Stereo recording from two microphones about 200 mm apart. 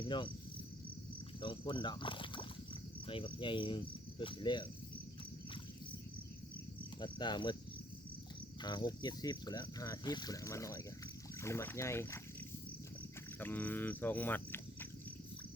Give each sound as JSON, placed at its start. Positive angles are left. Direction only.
{"t": 0.0, "sound": "speech", "side_deg": 25}
{"t": 1.4, "sound": "speech", "side_deg": 25}
{"t": 7.0, "sound": "speech", "side_deg": 25}
{"t": 8.6, "sound": "speech", "side_deg": 20}
{"t": 13.4, "sound": "speech", "side_deg": 10}